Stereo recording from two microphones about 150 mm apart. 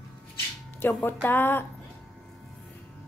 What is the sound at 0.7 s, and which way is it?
Speech, 15° left (ahead or behind).